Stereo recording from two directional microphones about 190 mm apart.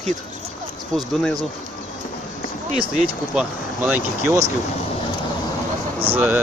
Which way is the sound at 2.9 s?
5° right (ahead or behind).